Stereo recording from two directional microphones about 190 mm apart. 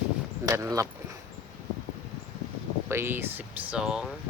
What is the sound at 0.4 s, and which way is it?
Speech, 15° right (ahead or behind).